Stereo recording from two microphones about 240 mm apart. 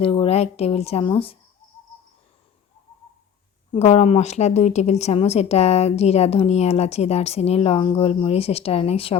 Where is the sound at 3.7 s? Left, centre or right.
Left.